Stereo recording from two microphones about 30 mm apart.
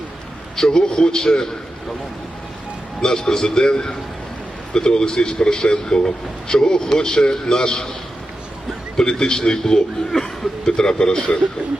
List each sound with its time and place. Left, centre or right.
0.5 s speech: left
3.0 s speech: left
9.0 s speech: left